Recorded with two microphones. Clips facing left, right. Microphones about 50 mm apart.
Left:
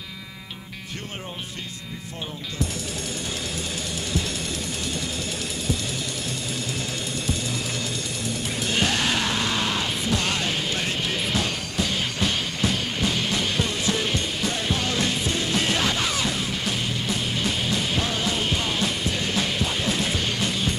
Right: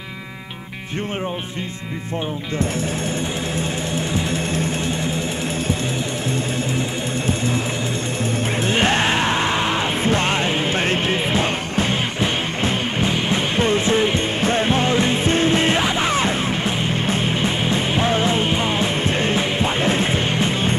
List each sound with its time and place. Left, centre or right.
8.6 s music: right
16.1 s music: right